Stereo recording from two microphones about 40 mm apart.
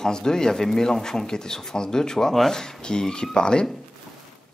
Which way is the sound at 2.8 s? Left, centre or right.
Centre.